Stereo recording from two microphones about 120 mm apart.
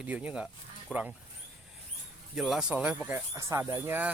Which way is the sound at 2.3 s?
5° right (ahead or behind).